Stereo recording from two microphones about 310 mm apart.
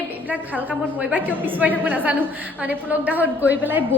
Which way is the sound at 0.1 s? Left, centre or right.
Centre.